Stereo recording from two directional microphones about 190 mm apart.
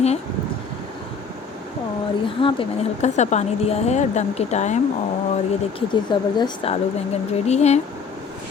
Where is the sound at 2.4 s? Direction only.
30° left (ahead or behind).